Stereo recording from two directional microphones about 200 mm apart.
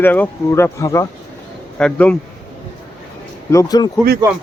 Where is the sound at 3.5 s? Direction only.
15° left (ahead or behind).